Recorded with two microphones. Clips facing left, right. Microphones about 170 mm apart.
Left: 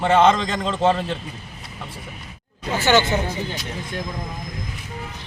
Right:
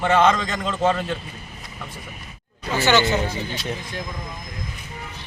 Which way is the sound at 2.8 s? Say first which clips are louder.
Left 1 dB; 50° left (ahead or behind).